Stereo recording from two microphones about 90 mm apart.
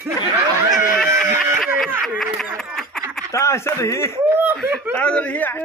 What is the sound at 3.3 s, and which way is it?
Speech, 30° left (ahead or behind).